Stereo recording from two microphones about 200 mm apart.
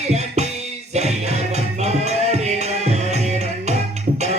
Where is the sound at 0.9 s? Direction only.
35° right (ahead or behind).